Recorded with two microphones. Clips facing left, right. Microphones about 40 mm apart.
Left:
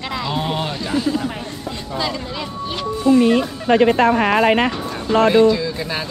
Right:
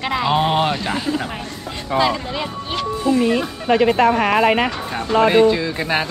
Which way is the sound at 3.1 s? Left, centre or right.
Centre.